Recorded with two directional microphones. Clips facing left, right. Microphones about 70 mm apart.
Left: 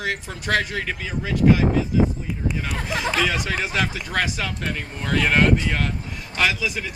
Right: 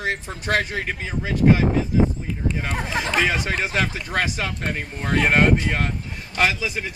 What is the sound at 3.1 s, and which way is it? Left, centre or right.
Speech, right.